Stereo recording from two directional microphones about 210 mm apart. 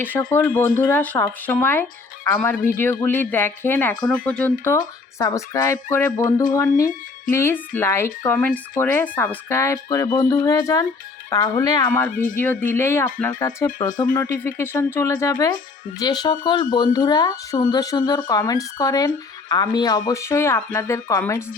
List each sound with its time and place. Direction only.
0.0 s speech: 10° left (ahead or behind)
5.2 s speech: 15° left (ahead or behind)
6.2 s speech: 40° left (ahead or behind)
7.3 s speech: 10° left (ahead or behind)
11.9 s speech: 5° left (ahead or behind)
12.1 s speech: 40° left (ahead or behind)
12.7 s speech: 10° left (ahead or behind)